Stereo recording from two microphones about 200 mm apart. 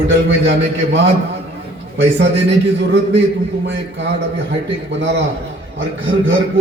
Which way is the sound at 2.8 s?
60° right (ahead or behind).